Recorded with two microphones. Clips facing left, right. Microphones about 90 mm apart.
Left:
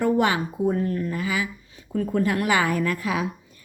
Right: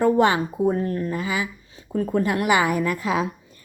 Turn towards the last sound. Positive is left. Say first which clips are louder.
# right 2 dB
turn(degrees=-25)  # may be behind; listen again after turning